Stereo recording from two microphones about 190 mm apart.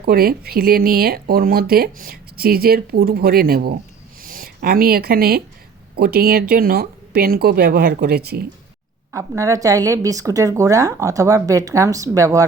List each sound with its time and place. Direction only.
0.0 s speech: 50° right (ahead or behind)
9.1 s a woman's voice: 15° right (ahead or behind)